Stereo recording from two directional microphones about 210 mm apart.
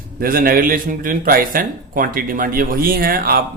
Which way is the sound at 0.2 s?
45° right (ahead or behind).